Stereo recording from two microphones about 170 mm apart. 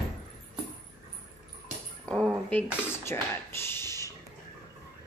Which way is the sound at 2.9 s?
15° left (ahead or behind).